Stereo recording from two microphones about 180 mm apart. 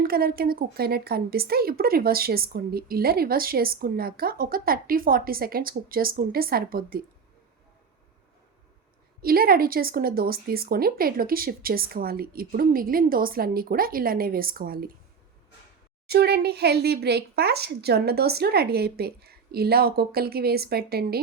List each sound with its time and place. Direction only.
0.0 s a woman's voice: 55° right (ahead or behind)
9.2 s a woman's voice: 55° right (ahead or behind)
16.0 s a woman's voice: 60° right (ahead or behind)